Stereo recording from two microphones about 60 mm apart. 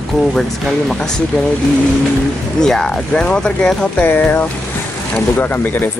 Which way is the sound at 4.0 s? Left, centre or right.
Left.